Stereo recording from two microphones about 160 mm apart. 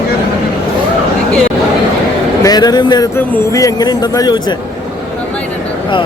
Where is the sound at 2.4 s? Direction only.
25° left (ahead or behind).